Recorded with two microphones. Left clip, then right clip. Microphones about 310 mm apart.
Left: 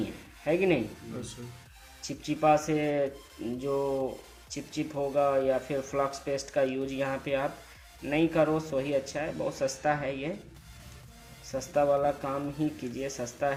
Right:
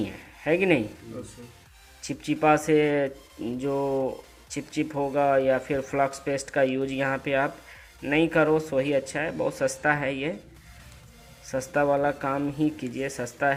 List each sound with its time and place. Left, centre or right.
0.0 s a sound: centre
2.0 s speech: centre
11.4 s speech: right